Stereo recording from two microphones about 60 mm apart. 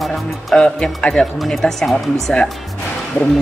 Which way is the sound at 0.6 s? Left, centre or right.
Centre.